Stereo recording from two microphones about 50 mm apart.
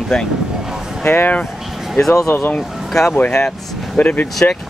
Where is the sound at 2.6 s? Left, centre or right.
Centre.